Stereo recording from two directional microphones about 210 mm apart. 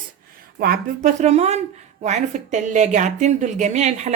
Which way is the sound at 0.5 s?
45° right (ahead or behind).